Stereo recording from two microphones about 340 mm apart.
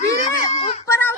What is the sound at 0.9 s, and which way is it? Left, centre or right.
Child singing, centre.